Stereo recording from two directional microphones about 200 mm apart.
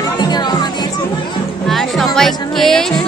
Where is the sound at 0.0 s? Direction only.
20° left (ahead or behind).